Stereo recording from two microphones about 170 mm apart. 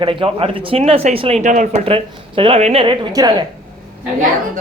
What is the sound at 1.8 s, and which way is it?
Speech, 30° right (ahead or behind).